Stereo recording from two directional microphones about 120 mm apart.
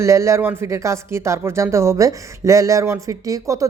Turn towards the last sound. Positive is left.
turn(degrees=-30)  # may be behind; listen again after turning